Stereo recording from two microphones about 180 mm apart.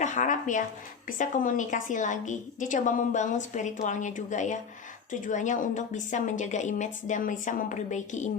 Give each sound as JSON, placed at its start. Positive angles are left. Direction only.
{"t": 0.0, "sound": "a woman's voice", "side_deg": 45}